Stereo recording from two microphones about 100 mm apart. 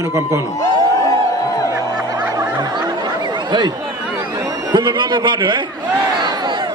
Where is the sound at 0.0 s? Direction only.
30° right (ahead or behind).